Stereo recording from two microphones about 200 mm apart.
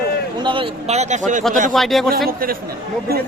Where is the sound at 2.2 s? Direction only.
45° right (ahead or behind).